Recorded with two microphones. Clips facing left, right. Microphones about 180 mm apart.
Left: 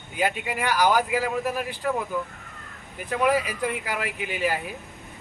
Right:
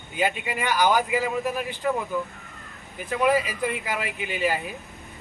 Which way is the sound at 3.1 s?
Centre (ahead or behind).